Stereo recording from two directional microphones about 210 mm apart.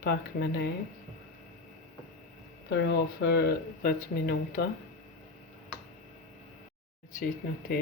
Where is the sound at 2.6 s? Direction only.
55° left (ahead or behind).